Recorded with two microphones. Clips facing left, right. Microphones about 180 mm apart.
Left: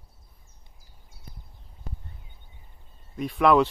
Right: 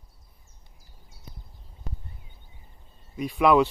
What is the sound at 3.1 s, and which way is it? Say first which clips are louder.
Speech: even; 5° right (ahead or behind).